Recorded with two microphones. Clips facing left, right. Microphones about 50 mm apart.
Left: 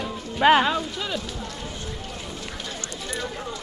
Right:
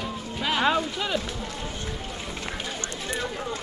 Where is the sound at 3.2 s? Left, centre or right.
Centre.